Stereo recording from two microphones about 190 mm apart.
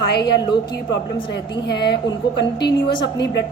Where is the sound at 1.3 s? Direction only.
60° left (ahead or behind).